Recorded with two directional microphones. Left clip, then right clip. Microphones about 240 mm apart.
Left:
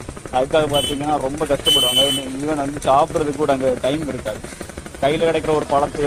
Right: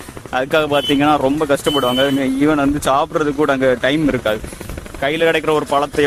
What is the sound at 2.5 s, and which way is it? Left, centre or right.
Speech, right.